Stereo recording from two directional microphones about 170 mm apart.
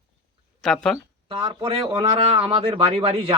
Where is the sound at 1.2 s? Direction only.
30° right (ahead or behind).